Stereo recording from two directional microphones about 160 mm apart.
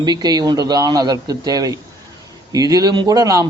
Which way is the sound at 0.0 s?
25° right (ahead or behind).